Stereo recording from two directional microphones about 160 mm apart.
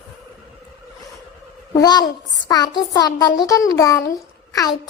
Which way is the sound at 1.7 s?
25° left (ahead or behind).